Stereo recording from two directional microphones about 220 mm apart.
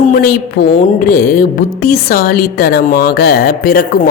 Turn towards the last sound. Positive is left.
turn(degrees=45)  # may be behind; listen again after turning